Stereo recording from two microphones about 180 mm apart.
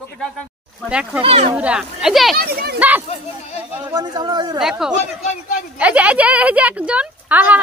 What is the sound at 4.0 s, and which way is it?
Speech, 20° right (ahead or behind).